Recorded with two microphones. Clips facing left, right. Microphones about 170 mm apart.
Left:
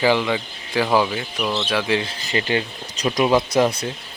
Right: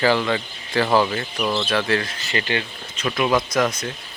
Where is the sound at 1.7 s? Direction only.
10° left (ahead or behind).